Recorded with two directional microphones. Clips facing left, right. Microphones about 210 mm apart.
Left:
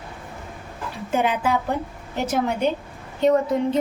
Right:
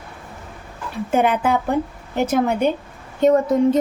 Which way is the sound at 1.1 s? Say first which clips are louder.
Right 4 dB; 55° right (ahead or behind).